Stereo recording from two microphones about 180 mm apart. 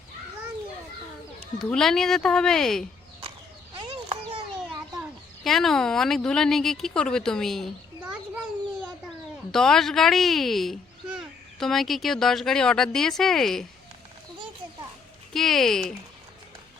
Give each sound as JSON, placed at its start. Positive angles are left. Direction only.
{"t": 1.5, "sound": "speech", "side_deg": 5}
{"t": 3.8, "sound": "a sound", "side_deg": -30}
{"t": 5.4, "sound": "speech", "side_deg": 0}
{"t": 9.5, "sound": "speech", "side_deg": 5}
{"t": 15.3, "sound": "speech", "side_deg": 0}